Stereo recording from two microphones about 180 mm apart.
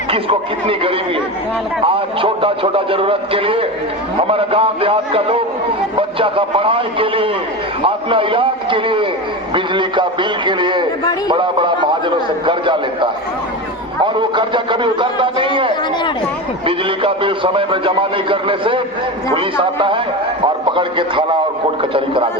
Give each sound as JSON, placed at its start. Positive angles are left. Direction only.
{"t": 0.1, "sound": "a man's voice", "side_deg": -30}